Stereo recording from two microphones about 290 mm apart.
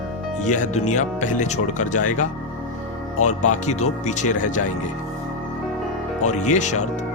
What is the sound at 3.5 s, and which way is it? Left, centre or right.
Speech, left.